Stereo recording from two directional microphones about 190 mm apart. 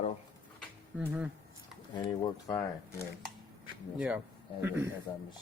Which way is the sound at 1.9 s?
20° left (ahead or behind).